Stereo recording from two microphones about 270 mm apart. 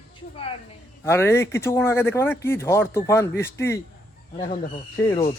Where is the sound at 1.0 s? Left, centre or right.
Centre.